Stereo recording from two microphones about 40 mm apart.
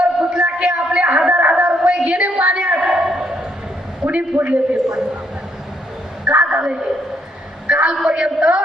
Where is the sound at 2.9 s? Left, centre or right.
Centre.